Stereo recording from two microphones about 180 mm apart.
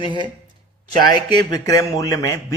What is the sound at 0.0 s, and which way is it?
A man's voice, 25° left (ahead or behind).